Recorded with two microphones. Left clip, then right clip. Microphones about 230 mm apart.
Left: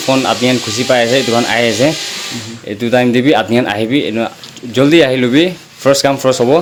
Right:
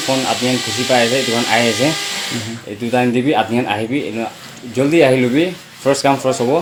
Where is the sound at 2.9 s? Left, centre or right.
Left.